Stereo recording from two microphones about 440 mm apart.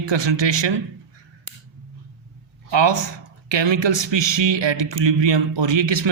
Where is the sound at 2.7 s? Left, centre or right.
Right.